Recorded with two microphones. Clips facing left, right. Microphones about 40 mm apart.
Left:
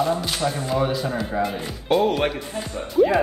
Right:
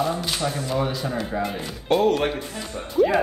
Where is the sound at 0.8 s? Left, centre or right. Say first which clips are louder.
Left 3 dB; centre.